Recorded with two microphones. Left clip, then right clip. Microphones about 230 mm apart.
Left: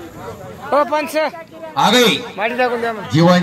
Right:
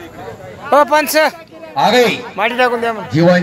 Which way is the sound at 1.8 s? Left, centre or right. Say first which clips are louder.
Right 1 dB; left.